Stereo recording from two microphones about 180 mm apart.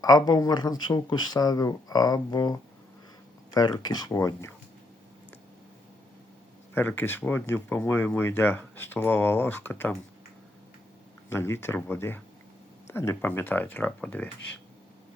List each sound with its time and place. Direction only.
0.0 s speech: 20° left (ahead or behind)
6.7 s speech: 10° left (ahead or behind)
11.3 s speech: 15° left (ahead or behind)